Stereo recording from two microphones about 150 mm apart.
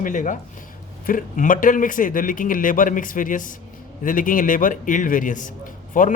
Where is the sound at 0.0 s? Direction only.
60° left (ahead or behind).